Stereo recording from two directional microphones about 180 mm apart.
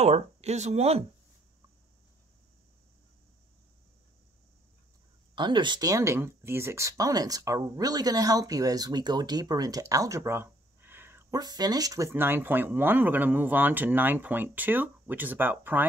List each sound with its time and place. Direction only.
0.0 s speech: 35° right (ahead or behind)
5.3 s speech: 25° right (ahead or behind); by 15.9 s 10° right (ahead or behind)